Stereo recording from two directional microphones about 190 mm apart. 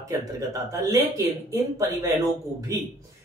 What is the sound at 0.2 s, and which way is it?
Speech, 20° right (ahead or behind).